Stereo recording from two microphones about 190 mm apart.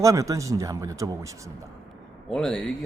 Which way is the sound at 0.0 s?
15° right (ahead or behind).